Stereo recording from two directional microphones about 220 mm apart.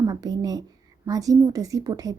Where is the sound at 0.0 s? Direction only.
15° right (ahead or behind).